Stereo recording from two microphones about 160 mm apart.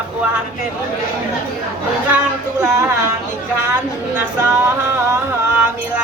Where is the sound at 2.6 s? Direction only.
15° right (ahead or behind).